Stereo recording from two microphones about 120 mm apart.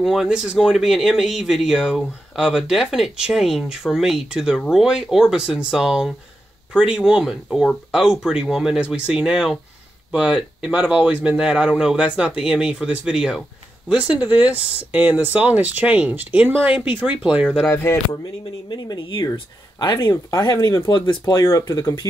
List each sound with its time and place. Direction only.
0.0 s speech: centre (ahead or behind)
18.7 s speech: 40° left (ahead or behind)